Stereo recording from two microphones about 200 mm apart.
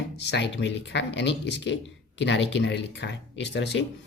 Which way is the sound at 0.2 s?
60° left (ahead or behind).